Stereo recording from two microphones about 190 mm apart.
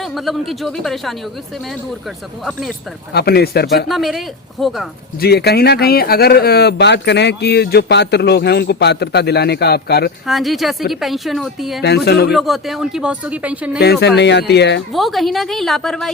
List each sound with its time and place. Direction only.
0.0 s speech: centre (ahead or behind)
2.4 s speech: centre (ahead or behind)
3.1 s speech: 60° left (ahead or behind)
3.8 s speech: centre (ahead or behind)
5.2 s speech: 55° left (ahead or behind)
10.2 s speech: centre (ahead or behind)
11.8 s speech: 60° left (ahead or behind)
12.3 s speech: centre (ahead or behind)
13.7 s speech: 60° left (ahead or behind)
14.9 s speech: centre (ahead or behind)